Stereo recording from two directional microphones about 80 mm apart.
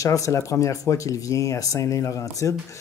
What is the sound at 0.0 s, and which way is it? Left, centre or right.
Speech, left.